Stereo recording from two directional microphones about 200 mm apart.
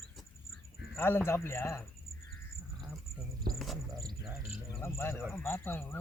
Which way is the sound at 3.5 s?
50° right (ahead or behind).